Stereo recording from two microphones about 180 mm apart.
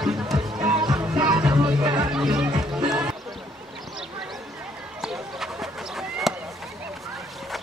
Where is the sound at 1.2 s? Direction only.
5° right (ahead or behind).